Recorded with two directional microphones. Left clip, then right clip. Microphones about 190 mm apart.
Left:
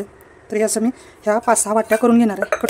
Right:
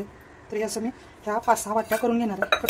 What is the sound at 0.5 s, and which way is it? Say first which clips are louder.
Speech: left 10 dB; 60° left (ahead or behind).